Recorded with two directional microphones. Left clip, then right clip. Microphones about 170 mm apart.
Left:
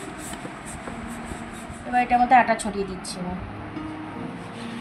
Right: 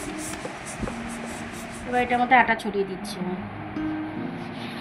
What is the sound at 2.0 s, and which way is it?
Speech, 40° left (ahead or behind).